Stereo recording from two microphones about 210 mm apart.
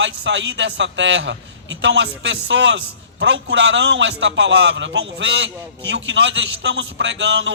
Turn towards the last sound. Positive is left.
turn(degrees=-60)  # may be behind; listen again after turning